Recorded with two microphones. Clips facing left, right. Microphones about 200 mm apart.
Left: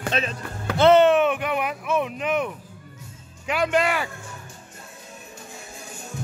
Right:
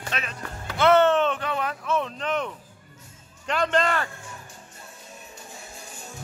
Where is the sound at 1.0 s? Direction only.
10° left (ahead or behind).